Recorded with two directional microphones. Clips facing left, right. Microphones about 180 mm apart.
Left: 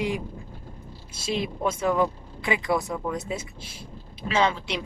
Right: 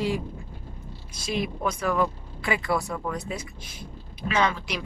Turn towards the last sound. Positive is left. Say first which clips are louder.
# left 1 dB
turn(degrees=25)  # may be behind; listen again after turning